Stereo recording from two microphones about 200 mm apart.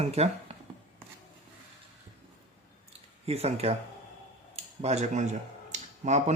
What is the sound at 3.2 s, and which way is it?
Speech, 30° right (ahead or behind).